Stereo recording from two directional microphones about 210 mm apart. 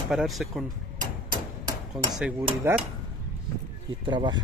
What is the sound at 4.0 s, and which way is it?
Speech, 20° right (ahead or behind).